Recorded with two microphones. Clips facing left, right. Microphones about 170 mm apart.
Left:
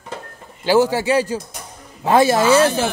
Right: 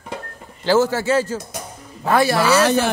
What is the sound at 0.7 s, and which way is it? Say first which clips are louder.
A man's voice: left 1 dB; 15° left (ahead or behind).